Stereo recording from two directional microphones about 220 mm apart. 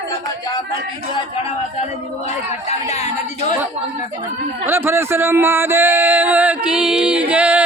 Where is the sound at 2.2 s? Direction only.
30° left (ahead or behind).